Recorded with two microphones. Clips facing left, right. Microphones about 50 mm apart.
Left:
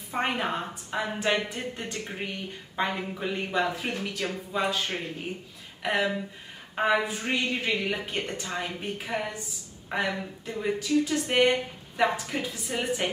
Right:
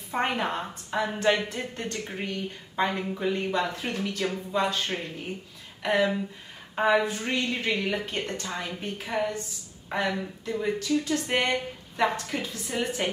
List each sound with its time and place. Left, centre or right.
0.1 s a woman's voice: centre